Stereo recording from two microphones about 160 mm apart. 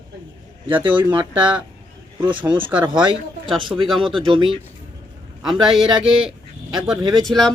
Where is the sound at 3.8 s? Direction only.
Centre (ahead or behind).